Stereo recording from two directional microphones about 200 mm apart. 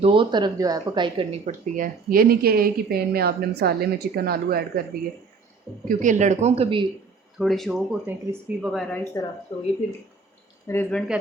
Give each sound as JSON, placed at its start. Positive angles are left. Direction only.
{"t": 0.0, "sound": "speech", "side_deg": -25}
{"t": 1.5, "sound": "a woman's voice", "side_deg": -40}
{"t": 5.9, "sound": "speech", "side_deg": -40}
{"t": 7.3, "sound": "speech", "side_deg": 0}
{"t": 9.2, "sound": "speech", "side_deg": 15}
{"t": 10.7, "sound": "speech", "side_deg": 10}